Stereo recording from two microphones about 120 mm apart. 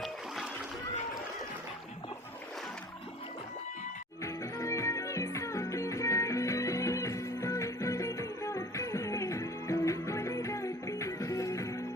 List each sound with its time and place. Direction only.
4.2 s music: 25° left (ahead or behind)